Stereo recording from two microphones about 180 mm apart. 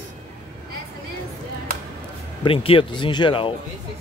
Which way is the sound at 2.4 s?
30° left (ahead or behind).